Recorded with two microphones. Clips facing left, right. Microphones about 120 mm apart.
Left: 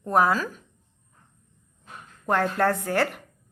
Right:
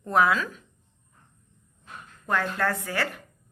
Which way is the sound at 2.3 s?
40° left (ahead or behind).